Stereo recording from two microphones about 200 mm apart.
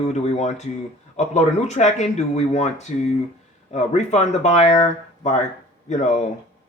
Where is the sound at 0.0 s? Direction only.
35° left (ahead or behind).